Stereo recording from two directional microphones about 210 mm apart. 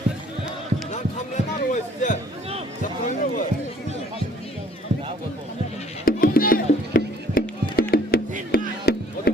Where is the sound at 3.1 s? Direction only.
35° left (ahead or behind).